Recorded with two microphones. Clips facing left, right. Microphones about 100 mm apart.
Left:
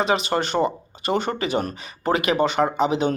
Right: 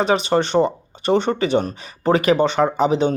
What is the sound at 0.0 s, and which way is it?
Speech, 35° right (ahead or behind).